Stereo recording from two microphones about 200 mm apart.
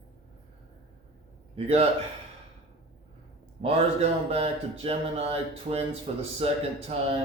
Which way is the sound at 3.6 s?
30° right (ahead or behind).